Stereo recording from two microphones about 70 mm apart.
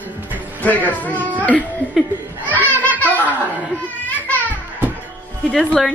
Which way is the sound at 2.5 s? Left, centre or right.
Left.